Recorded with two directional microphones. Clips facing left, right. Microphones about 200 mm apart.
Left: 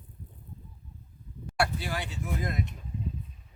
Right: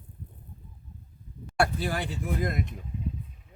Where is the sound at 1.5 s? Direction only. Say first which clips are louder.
Right 3 dB; 50° right (ahead or behind).